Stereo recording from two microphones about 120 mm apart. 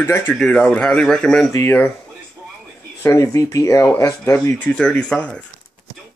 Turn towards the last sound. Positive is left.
turn(degrees=10)  # may be behind; listen again after turning